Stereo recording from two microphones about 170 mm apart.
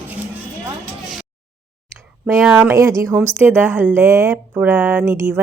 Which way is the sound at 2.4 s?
10° right (ahead or behind).